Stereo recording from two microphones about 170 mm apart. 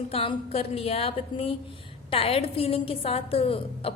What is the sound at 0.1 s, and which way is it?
A woman's voice, 35° left (ahead or behind).